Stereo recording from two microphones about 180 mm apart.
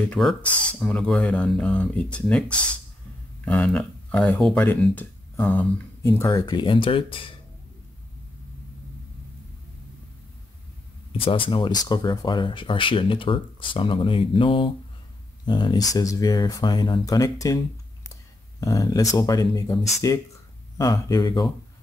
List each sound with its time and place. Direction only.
0.1 s speech: centre (ahead or behind)
6.1 s speech: 20° left (ahead or behind)
11.1 s speech: 30° left (ahead or behind)
18.6 s speech: 20° left (ahead or behind)